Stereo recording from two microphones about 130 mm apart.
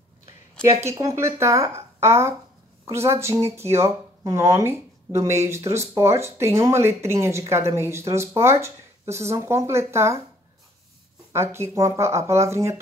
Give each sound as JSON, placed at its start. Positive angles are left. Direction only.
{"t": 0.8, "sound": "speech", "side_deg": -25}
{"t": 11.3, "sound": "speech", "side_deg": -20}